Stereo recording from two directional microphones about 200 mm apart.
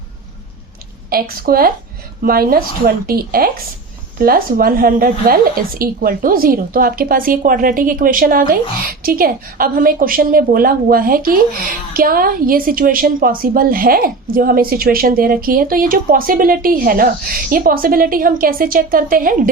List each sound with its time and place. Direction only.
1.1 s a woman's voice: 45° right (ahead or behind)